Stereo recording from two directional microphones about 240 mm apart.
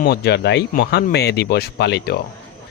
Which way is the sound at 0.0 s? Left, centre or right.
Left.